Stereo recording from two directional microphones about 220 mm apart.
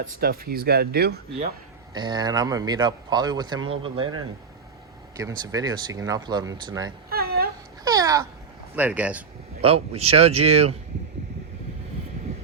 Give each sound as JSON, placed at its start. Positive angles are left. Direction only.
{"t": 0.0, "sound": "speech", "side_deg": -45}
{"t": 1.9, "sound": "speech", "side_deg": -20}
{"t": 5.1, "sound": "speech", "side_deg": -15}
{"t": 7.1, "sound": "a sound", "side_deg": -45}
{"t": 7.9, "sound": "a sound", "side_deg": -15}
{"t": 8.7, "sound": "speech", "side_deg": -5}
{"t": 9.6, "sound": "speech", "side_deg": -25}